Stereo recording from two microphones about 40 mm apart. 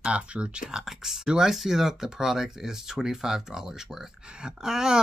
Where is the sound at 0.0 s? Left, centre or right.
Right.